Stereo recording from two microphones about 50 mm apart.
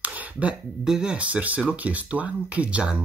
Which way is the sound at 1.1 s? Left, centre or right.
Right.